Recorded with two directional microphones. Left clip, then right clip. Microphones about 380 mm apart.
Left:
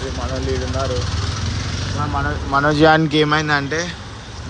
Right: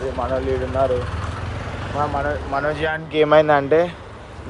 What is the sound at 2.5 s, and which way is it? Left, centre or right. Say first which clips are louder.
Speech: left 12 dB; centre.